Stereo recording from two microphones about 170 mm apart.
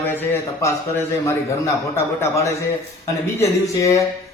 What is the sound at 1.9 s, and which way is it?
A man's voice, 15° left (ahead or behind).